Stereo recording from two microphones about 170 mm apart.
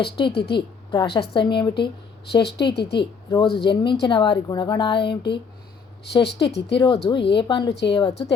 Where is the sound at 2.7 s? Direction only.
75° left (ahead or behind).